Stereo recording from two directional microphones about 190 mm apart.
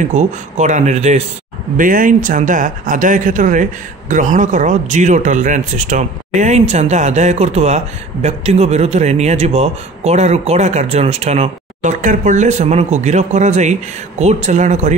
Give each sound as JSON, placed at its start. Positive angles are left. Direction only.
{"t": 0.1, "sound": "speech", "side_deg": -40}